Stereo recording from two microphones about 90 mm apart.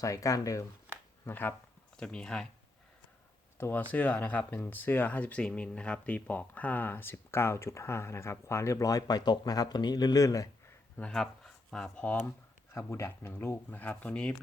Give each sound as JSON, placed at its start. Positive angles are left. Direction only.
{"t": 0.0, "sound": "speech", "side_deg": 40}
{"t": 0.9, "sound": "a sound", "side_deg": -20}
{"t": 1.2, "sound": "speech", "side_deg": 25}
{"t": 2.0, "sound": "speech", "side_deg": 10}
{"t": 3.6, "sound": "speech", "side_deg": 20}
{"t": 11.1, "sound": "speech", "side_deg": 5}
{"t": 12.7, "sound": "speech", "side_deg": 30}